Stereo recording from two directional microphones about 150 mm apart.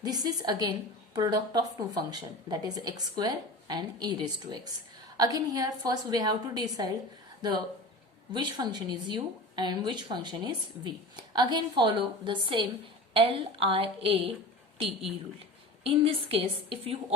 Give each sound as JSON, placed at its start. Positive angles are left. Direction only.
{"t": 0.0, "sound": "a woman's voice", "side_deg": -25}
{"t": 8.3, "sound": "a woman's voice", "side_deg": -30}
{"t": 15.8, "sound": "a woman's voice", "side_deg": -40}